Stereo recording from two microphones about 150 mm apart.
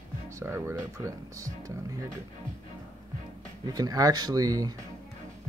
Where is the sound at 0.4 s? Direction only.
15° right (ahead or behind).